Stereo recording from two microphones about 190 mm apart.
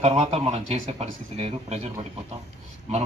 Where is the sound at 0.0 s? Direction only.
35° right (ahead or behind).